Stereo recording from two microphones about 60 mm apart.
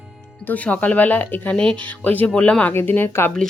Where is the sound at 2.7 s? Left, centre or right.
Left.